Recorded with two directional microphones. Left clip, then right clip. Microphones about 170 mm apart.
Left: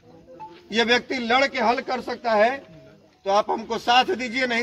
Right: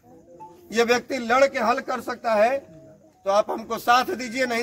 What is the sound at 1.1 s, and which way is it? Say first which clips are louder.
A man's voice: right 1 dB; 10° right (ahead or behind).